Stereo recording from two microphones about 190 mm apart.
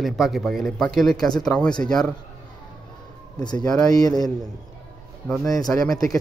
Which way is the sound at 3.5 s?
20° left (ahead or behind).